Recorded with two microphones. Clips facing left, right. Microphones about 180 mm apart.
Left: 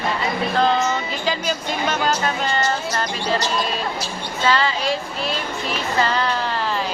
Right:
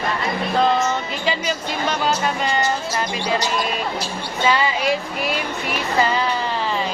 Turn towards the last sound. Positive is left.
turn(degrees=-5)  # may be behind; listen again after turning